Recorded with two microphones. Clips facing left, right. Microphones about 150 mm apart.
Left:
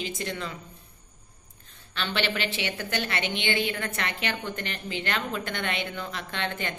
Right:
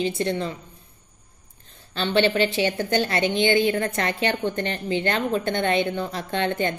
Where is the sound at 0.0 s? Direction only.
35° right (ahead or behind).